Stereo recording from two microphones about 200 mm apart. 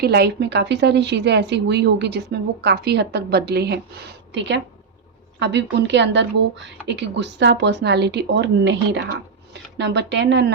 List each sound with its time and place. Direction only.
0.0 s a woman's voice: 55° right (ahead or behind)